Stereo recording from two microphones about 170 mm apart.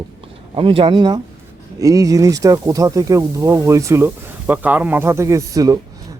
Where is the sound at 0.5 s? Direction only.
30° right (ahead or behind).